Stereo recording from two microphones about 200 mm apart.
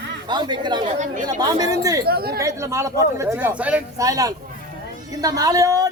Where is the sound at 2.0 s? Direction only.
50° right (ahead or behind).